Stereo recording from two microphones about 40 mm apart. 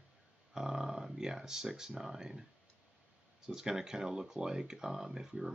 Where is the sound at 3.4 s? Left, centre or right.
Centre.